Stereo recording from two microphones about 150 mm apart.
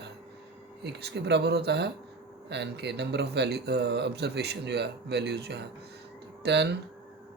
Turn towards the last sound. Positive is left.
turn(degrees=-90)